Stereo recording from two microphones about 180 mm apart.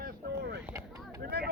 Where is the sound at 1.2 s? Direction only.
60° right (ahead or behind).